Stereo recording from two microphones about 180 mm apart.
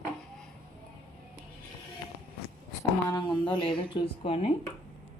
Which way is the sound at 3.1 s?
25° left (ahead or behind).